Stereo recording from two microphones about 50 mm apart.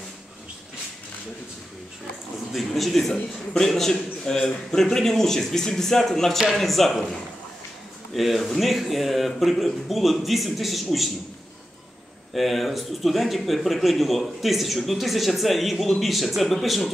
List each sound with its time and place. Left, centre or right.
2.5 s a man's voice: centre
12.4 s speech: centre